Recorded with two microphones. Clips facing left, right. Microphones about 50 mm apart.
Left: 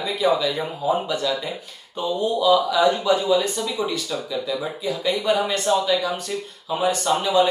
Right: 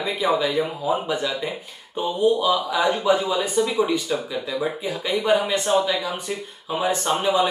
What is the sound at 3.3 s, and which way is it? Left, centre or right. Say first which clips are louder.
Speech: left 1 dB; centre.